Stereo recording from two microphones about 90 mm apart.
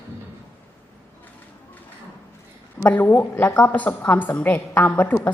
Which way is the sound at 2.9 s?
20° left (ahead or behind).